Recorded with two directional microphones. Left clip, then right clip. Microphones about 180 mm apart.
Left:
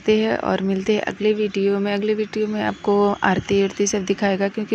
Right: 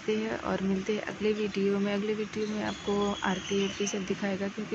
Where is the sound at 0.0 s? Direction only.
40° left (ahead or behind).